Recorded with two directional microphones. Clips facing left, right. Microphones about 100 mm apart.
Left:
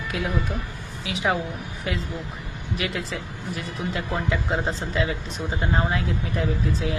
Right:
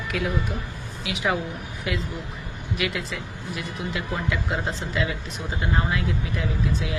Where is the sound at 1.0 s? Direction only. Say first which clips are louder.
Left 1 dB; 30° left (ahead or behind).